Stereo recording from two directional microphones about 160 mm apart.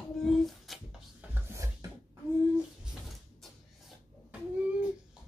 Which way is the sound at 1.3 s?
15° right (ahead or behind).